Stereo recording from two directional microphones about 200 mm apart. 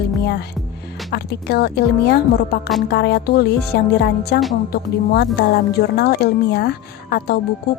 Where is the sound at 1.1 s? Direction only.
55° left (ahead or behind).